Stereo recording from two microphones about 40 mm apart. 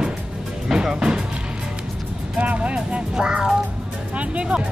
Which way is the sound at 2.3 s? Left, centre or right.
Right.